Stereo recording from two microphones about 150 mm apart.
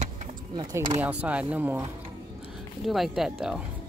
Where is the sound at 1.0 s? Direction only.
10° right (ahead or behind).